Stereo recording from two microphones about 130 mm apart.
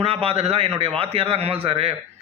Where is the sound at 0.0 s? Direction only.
50° right (ahead or behind).